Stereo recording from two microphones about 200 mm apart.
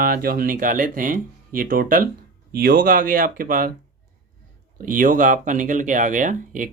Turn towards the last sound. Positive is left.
turn(degrees=-40)  # may be behind; listen again after turning